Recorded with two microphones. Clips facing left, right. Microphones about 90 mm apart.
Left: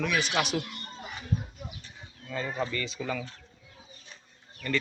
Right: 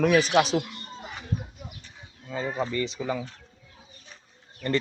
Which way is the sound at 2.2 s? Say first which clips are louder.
Right 3 dB; 20° right (ahead or behind).